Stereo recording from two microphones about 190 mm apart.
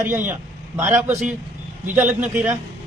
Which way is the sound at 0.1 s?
10° right (ahead or behind).